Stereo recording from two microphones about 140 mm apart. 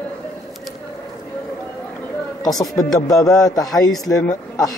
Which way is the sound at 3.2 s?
25° left (ahead or behind).